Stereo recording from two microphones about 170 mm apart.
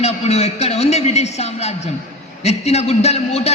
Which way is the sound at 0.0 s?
40° left (ahead or behind).